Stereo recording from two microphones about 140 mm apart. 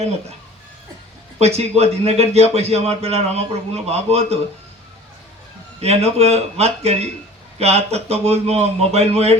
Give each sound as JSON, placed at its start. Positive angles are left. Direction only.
{"t": 1.4, "sound": "a man's voice", "side_deg": -50}
{"t": 5.8, "sound": "a man's voice", "side_deg": -50}